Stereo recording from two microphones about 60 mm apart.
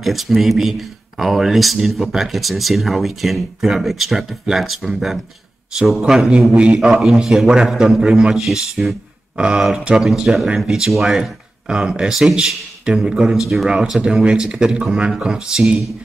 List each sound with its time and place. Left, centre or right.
0.0 s a man's voice: centre